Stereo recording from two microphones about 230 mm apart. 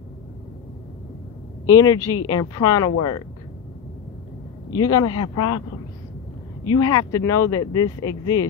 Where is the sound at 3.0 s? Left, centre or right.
Left.